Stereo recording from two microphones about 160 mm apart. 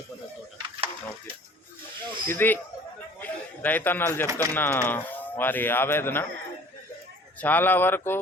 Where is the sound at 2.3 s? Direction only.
10° left (ahead or behind).